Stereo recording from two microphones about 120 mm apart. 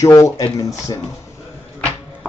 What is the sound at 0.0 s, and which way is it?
Speech, 25° left (ahead or behind).